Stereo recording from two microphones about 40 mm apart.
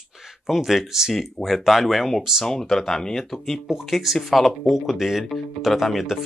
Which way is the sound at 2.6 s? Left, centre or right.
Centre.